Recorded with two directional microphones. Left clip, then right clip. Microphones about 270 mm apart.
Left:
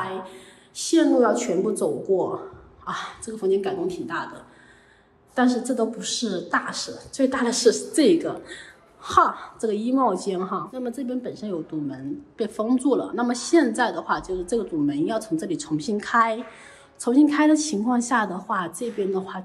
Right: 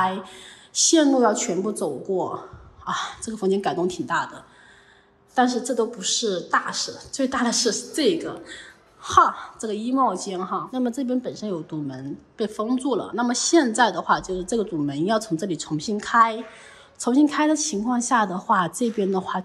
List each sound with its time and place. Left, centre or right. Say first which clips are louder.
0.7 s a woman's voice: right 1 dB; centre
5.3 s a woman's voice: right 2 dB; centre